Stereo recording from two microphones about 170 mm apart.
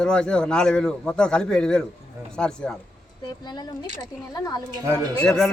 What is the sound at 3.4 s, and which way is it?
Speech, 25° left (ahead or behind).